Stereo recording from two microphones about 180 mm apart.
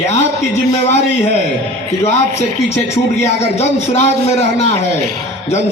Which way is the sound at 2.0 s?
40° left (ahead or behind).